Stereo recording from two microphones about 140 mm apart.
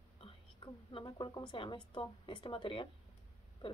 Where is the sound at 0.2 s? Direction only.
40° left (ahead or behind).